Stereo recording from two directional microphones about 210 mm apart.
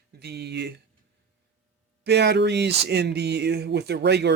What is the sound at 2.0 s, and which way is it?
Speech, 55° right (ahead or behind).